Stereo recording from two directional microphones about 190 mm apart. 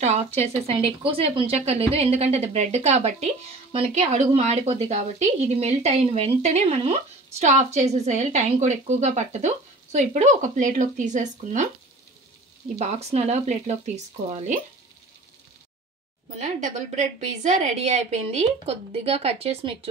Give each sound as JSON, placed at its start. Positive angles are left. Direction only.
{"t": 0.0, "sound": "a woman's voice", "side_deg": -35}
{"t": 12.7, "sound": "a woman's voice", "side_deg": -35}
{"t": 16.3, "sound": "a woman's voice", "side_deg": -40}